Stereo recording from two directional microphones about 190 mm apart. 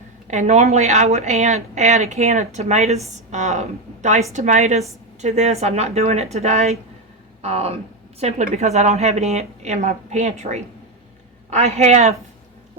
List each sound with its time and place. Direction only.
0.3 s a woman's voice: 40° right (ahead or behind)